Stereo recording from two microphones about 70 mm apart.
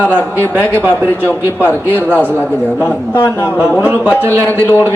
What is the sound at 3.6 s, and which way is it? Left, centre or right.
Speech, right.